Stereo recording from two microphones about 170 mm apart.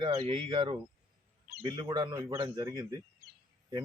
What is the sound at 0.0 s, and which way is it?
Speech, 30° right (ahead or behind).